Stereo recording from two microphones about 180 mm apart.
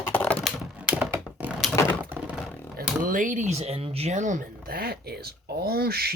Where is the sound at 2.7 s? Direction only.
50° right (ahead or behind).